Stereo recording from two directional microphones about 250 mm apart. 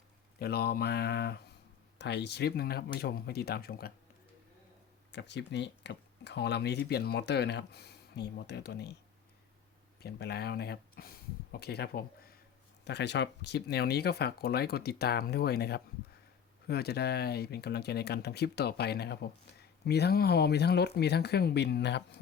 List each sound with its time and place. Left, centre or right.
0.3 s speech: left
5.1 s speech: left
10.0 s speech: left